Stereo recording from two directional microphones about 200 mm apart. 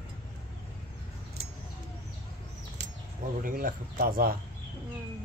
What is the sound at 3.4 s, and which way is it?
Speech, 45° right (ahead or behind).